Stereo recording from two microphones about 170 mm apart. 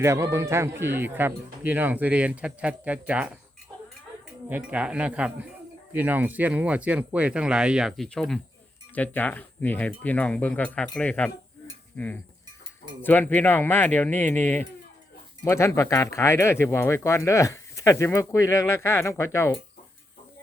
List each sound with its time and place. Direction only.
0.0 s speech: 15° right (ahead or behind)
4.4 s speech: 10° right (ahead or behind); by 19.5 s 15° left (ahead or behind)